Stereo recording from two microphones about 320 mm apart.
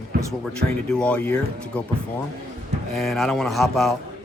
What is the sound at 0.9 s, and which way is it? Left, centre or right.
Speech, centre.